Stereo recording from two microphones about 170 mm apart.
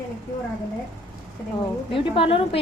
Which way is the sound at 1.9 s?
30° left (ahead or behind).